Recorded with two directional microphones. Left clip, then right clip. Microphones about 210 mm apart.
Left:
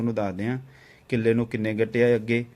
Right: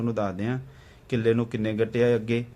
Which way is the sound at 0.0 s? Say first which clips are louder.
Left 1 dB; 15° left (ahead or behind).